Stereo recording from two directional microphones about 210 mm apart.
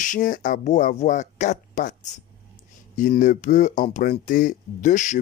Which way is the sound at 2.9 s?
35° left (ahead or behind).